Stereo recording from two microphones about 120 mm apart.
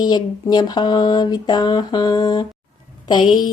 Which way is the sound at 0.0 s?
35° left (ahead or behind).